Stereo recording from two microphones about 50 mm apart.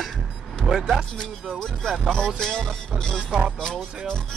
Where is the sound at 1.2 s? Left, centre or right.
Centre.